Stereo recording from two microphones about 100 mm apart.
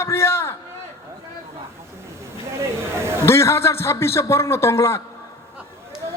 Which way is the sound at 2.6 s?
25° right (ahead or behind).